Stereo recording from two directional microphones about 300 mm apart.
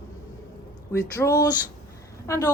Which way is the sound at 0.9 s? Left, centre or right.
Centre.